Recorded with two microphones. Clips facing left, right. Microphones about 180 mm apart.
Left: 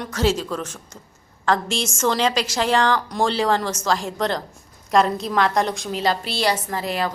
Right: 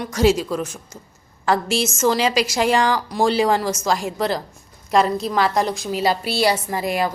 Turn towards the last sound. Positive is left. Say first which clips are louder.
# right 3 dB
turn(degrees=-15)  # may be behind; listen again after turning